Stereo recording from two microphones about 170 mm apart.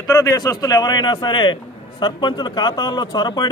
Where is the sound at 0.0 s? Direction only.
20° left (ahead or behind).